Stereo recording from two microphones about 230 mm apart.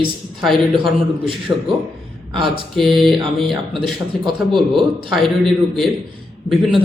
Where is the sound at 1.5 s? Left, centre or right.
Centre.